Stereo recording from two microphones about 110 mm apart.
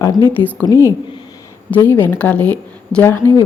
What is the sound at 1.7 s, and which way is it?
A woman's voice, 20° left (ahead or behind).